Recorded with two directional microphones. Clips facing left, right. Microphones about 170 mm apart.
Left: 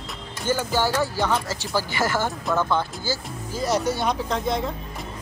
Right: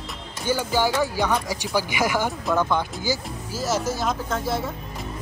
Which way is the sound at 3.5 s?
Centre (ahead or behind).